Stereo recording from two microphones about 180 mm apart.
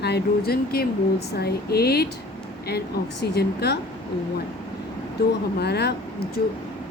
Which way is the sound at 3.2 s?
65° left (ahead or behind).